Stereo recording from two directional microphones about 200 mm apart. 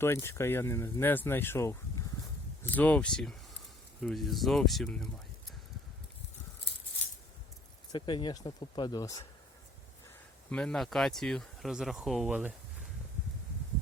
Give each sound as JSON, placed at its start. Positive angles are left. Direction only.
{"t": 0.0, "sound": "speech", "side_deg": 10}
{"t": 7.9, "sound": "speech", "side_deg": 25}
{"t": 10.5, "sound": "speech", "side_deg": 5}